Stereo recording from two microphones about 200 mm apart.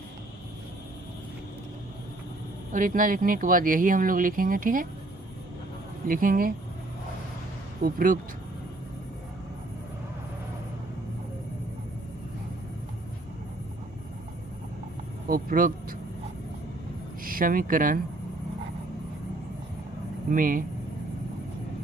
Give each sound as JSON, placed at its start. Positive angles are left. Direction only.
{"t": 2.7, "sound": "speech", "side_deg": -40}
{"t": 6.1, "sound": "speech", "side_deg": -45}
{"t": 7.8, "sound": "speech", "side_deg": -45}
{"t": 15.3, "sound": "speech", "side_deg": -45}
{"t": 17.2, "sound": "speech", "side_deg": -45}
{"t": 20.3, "sound": "speech", "side_deg": -45}